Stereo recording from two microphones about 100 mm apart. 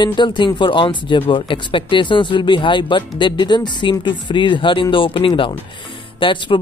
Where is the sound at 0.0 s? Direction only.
50° left (ahead or behind).